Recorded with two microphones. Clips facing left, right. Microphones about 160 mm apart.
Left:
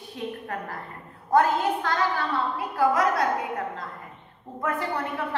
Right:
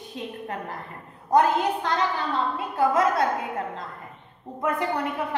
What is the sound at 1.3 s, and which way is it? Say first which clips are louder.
A woman's voice: right 1 dB; 20° right (ahead or behind).